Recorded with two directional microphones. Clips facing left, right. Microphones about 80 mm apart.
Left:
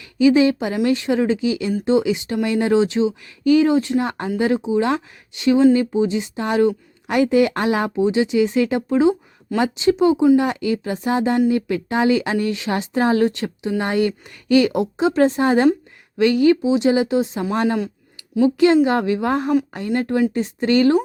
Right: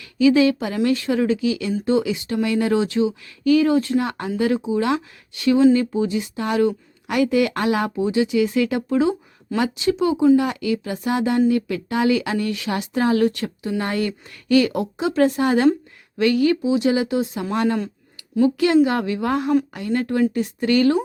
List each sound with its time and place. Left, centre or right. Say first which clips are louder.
0.0 s a woman's voice: left 1 dB; left